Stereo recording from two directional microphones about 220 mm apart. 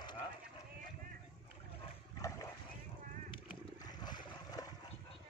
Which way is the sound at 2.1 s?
15° left (ahead or behind).